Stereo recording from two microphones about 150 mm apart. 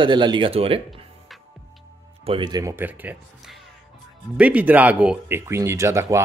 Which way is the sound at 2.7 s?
10° right (ahead or behind).